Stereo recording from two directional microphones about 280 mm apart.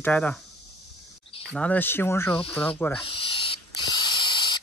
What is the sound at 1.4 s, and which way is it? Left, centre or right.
Speech, centre.